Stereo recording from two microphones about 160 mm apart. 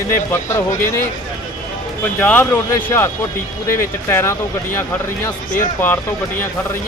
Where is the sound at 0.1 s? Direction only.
15° left (ahead or behind).